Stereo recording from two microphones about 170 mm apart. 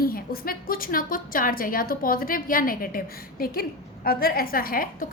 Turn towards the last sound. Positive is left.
turn(degrees=55)  # may be behind; listen again after turning